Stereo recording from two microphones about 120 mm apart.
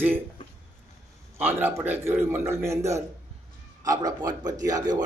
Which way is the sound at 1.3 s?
15° right (ahead or behind).